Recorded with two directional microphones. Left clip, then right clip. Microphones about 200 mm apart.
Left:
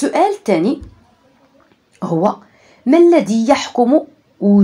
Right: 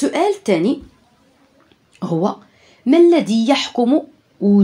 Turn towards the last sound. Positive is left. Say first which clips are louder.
# left 2 dB
turn(degrees=-25)  # may be behind; listen again after turning